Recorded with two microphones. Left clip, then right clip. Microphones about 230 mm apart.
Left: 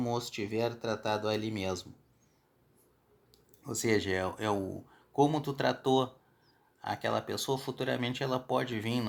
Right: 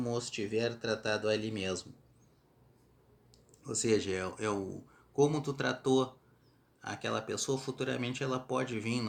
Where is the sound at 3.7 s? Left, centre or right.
Left.